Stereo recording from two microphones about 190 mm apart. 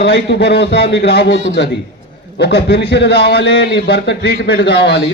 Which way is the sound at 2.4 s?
60° left (ahead or behind).